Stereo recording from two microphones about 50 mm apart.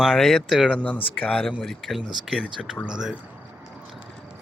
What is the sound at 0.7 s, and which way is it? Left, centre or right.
Speech, left.